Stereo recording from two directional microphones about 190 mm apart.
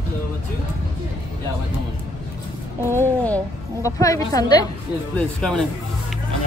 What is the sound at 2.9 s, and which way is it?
Music, 10° left (ahead or behind).